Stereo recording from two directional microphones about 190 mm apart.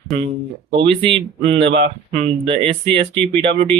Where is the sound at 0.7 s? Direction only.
30° right (ahead or behind).